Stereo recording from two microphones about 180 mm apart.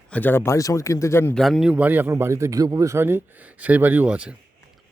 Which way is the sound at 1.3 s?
Centre (ahead or behind).